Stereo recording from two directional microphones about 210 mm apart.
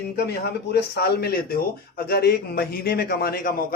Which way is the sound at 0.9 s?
50° left (ahead or behind).